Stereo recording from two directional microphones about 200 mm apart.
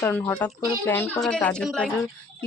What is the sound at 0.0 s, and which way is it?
A woman's voice, 10° left (ahead or behind).